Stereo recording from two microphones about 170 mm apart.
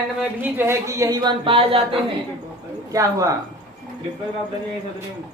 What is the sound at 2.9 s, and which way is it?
Speech, 20° right (ahead or behind).